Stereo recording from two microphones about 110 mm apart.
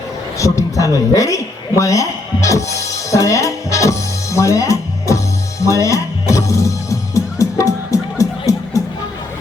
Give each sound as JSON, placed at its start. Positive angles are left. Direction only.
{"t": 0.3, "sound": "a man's voice", "side_deg": 30}
{"t": 2.9, "sound": "music", "side_deg": 30}